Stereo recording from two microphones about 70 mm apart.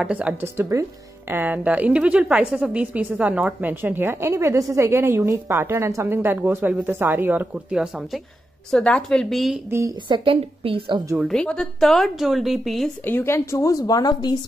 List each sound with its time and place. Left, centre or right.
0.0 s a woman's voice: centre
0.4 s a woman's voice: right; by 3.7 s centre
3.8 s speech: right
4.3 s a woman's voice: right
4.9 s a woman's voice: right
7.5 s speech: centre
8.6 s a woman's voice: centre
9.3 s a woman's voice: centre
10.1 s a woman's voice: right
11.3 s a woman's voice: centre
13.0 s a woman's voice: left